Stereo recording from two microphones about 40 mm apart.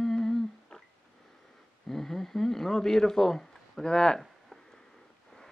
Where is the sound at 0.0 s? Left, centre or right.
Centre.